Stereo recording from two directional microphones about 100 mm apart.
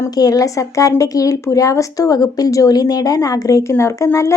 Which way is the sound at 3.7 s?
25° left (ahead or behind).